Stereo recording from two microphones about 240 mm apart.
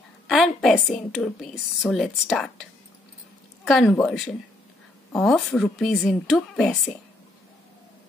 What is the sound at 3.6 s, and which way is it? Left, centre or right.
A woman's voice, centre.